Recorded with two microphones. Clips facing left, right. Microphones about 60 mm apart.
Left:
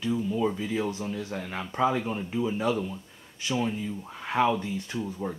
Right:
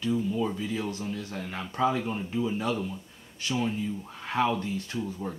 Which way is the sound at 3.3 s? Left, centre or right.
Left.